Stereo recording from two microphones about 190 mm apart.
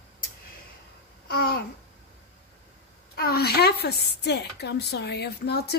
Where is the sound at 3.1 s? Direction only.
55° left (ahead or behind).